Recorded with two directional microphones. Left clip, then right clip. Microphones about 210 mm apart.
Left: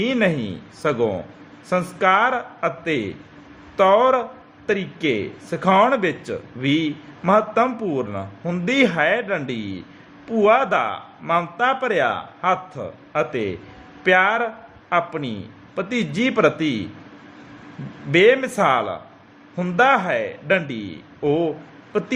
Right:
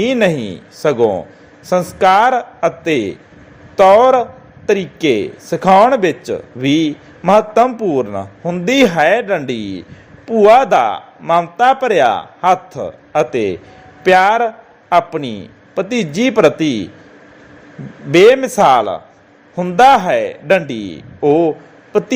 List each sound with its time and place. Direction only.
0.0 s a man's voice: 20° right (ahead or behind)
18.1 s a man's voice: 20° right (ahead or behind)